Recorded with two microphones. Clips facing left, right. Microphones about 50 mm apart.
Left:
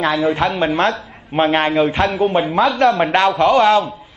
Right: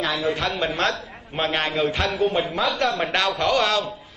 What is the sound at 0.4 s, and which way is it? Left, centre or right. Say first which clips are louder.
A man's voice: left 7 dB; left.